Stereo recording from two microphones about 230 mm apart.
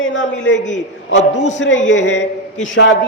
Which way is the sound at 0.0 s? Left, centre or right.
Left.